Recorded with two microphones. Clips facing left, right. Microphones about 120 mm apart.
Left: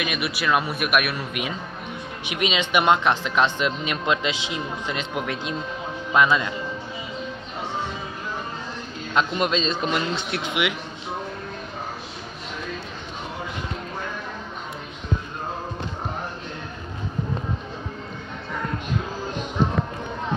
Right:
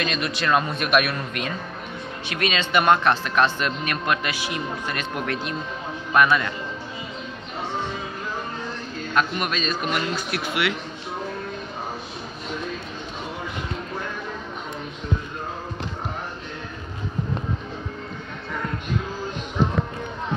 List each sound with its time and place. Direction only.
0.0 s a man's voice: 10° left (ahead or behind)
9.1 s a man's voice: 25° left (ahead or behind)